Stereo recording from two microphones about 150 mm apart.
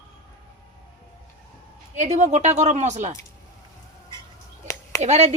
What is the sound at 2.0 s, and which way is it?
A woman's voice, 50° right (ahead or behind).